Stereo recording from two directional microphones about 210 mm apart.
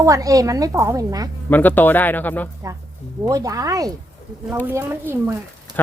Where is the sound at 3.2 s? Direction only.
15° right (ahead or behind).